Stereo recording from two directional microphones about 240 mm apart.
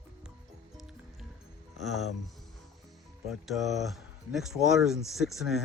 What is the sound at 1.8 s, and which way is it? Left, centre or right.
Speech, centre.